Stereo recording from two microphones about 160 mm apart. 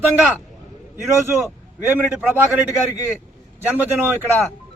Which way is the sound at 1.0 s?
15° right (ahead or behind).